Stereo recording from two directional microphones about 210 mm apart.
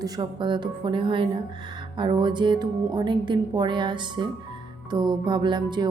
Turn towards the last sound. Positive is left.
turn(degrees=-20)  # may be behind; listen again after turning